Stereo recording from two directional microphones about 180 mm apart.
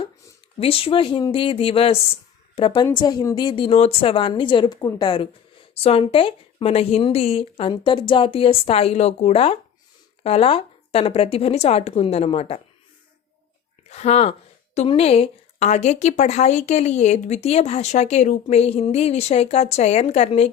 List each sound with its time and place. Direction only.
0.6 s a woman's voice: 30° left (ahead or behind)
13.9 s a woman's voice: 35° left (ahead or behind)